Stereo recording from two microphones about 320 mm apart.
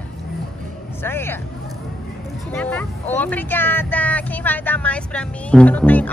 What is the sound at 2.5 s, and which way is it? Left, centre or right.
Speech, centre.